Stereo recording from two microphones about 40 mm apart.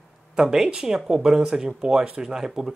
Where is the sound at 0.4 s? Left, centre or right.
Centre.